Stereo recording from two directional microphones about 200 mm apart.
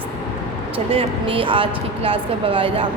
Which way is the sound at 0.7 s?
25° right (ahead or behind).